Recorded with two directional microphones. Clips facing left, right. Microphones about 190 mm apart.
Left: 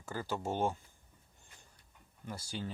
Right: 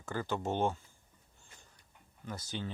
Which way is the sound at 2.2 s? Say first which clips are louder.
Right 1 dB; 10° left (ahead or behind).